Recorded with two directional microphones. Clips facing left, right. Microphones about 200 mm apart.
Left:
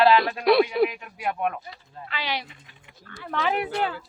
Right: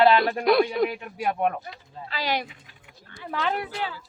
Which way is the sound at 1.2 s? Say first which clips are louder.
Right 2 dB; 45° right (ahead or behind).